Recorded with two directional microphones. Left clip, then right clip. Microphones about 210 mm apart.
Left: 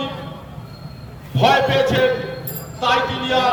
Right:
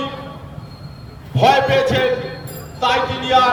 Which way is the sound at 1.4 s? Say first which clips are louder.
Right 2 dB; 15° right (ahead or behind).